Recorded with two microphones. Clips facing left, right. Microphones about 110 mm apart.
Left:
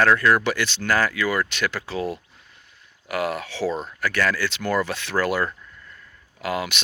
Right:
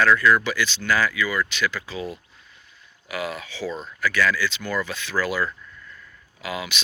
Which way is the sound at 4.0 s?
55° left (ahead or behind).